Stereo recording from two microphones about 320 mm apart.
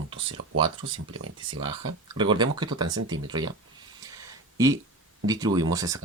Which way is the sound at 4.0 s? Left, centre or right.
Centre.